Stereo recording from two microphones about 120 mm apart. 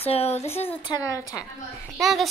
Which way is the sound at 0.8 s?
35° left (ahead or behind).